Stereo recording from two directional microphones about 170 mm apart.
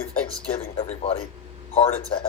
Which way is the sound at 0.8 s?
35° left (ahead or behind).